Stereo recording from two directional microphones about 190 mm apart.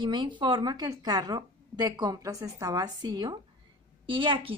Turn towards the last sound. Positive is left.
turn(degrees=-25)  # may be behind; listen again after turning